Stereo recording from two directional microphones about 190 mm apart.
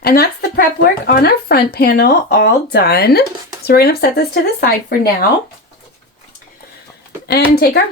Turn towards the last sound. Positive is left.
turn(degrees=55)  # may be behind; listen again after turning